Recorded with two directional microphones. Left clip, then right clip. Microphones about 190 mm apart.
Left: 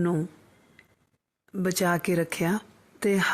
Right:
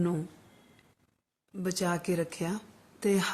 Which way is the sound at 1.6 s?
40° left (ahead or behind).